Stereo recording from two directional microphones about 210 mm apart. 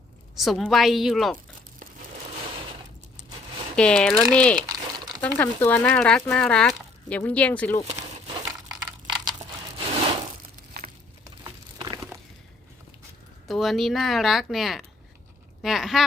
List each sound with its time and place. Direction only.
0.3 s a woman's voice: centre (ahead or behind)
3.8 s a woman's voice: 5° left (ahead or behind)
4.6 s crumpling: 20° right (ahead or behind)
5.4 s speech: 10° left (ahead or behind)
7.9 s crumpling: 30° right (ahead or behind)
8.7 s a sound: 15° right (ahead or behind)
10.8 s a sound: 50° right (ahead or behind)
11.4 s a sound: 15° right (ahead or behind)
13.5 s a woman's voice: centre (ahead or behind)